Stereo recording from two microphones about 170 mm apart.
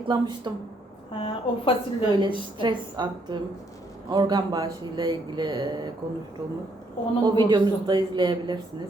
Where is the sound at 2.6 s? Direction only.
25° right (ahead or behind).